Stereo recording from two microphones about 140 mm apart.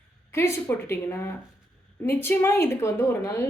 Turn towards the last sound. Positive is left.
turn(degrees=20)  # may be behind; listen again after turning